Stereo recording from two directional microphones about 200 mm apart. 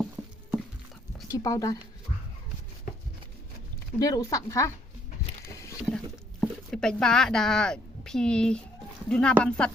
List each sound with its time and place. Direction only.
1.3 s speech: 15° left (ahead or behind)
3.9 s speech: 15° left (ahead or behind)
5.5 s a sound: 15° left (ahead or behind)
6.4 s speech: 5° left (ahead or behind)